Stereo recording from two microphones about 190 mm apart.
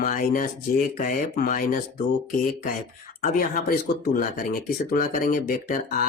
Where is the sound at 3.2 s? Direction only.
50° left (ahead or behind).